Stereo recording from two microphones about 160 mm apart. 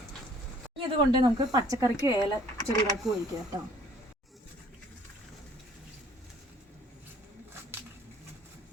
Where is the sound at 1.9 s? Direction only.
25° left (ahead or behind).